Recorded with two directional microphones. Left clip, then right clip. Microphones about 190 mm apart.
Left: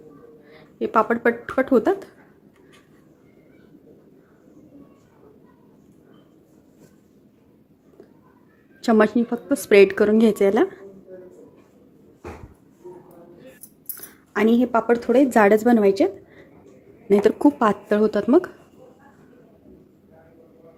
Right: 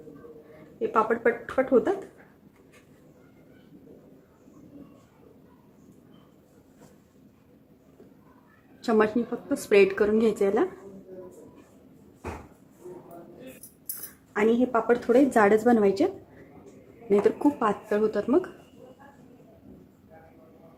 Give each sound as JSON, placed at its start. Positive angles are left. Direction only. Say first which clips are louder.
{"t": 0.8, "sound": "speech", "louder": "left 4 dB", "side_deg": 50}
{"t": 8.8, "sound": "a woman's voice", "louder": "left 5 dB", "side_deg": 40}
{"t": 14.3, "sound": "a woman's voice", "louder": "left 4 dB", "side_deg": 50}
{"t": 17.1, "sound": "speech", "louder": "left 5 dB", "side_deg": 45}